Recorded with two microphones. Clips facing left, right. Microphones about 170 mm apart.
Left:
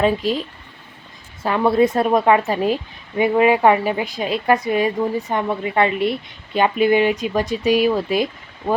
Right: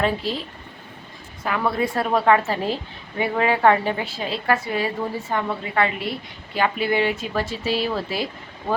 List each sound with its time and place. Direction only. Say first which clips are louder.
0.0 s a woman's voice: left 5 dB; 15° left (ahead or behind)
1.5 s a woman's voice: left 7 dB; 25° left (ahead or behind)